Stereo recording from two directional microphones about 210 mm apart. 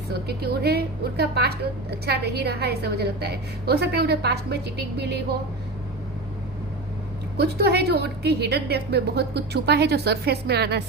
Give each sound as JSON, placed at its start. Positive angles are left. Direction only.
{"t": 0.1, "sound": "a woman's voice", "side_deg": -50}
{"t": 7.3, "sound": "a woman's voice", "side_deg": -50}